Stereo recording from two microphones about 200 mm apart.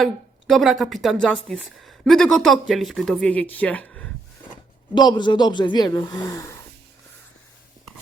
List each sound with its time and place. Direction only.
0.0 s a woman's voice: centre (ahead or behind)
4.9 s speech: 20° left (ahead or behind)